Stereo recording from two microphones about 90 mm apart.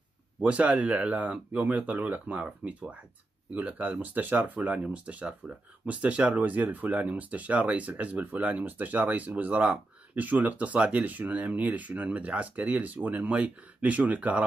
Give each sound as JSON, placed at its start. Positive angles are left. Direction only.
{"t": 0.4, "sound": "speech", "side_deg": -15}